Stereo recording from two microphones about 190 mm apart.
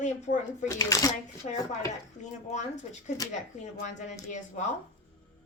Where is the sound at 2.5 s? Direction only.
40° left (ahead or behind).